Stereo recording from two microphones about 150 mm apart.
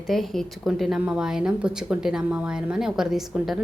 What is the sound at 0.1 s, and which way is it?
Speech, centre (ahead or behind).